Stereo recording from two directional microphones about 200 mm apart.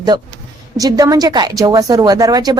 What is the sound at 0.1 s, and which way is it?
A woman's voice, 20° right (ahead or behind).